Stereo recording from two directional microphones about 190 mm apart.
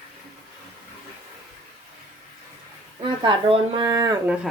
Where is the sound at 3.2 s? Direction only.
25° right (ahead or behind).